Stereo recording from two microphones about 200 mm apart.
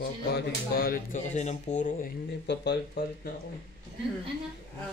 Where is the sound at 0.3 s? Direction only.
50° left (ahead or behind).